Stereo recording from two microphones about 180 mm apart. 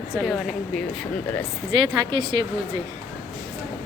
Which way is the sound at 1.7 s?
25° right (ahead or behind).